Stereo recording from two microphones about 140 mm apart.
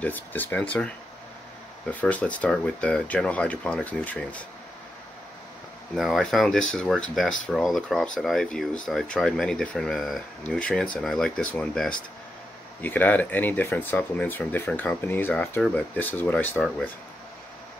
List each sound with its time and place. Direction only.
0.0 s speech: 15° left (ahead or behind)
5.9 s speech: centre (ahead or behind)